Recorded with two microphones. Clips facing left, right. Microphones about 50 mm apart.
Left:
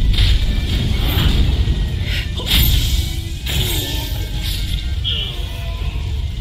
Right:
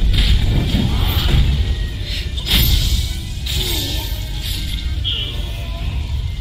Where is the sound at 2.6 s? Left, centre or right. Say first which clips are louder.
Even; left.